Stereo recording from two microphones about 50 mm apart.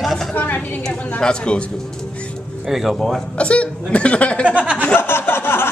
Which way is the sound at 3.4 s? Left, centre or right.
Left.